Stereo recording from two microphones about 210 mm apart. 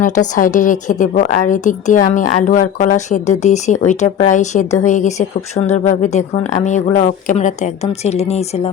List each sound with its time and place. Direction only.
0.0 s a woman's voice: 40° left (ahead or behind)